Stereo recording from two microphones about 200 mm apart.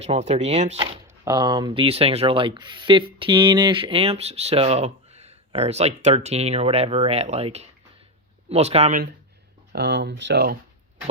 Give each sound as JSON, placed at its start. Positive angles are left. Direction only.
{"t": 0.0, "sound": "speech", "side_deg": -30}
{"t": 1.0, "sound": "speech", "side_deg": -15}
{"t": 9.7, "sound": "speech", "side_deg": -60}